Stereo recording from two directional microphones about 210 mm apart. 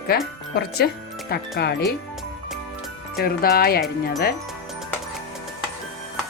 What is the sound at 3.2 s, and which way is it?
Speech, 45° left (ahead or behind).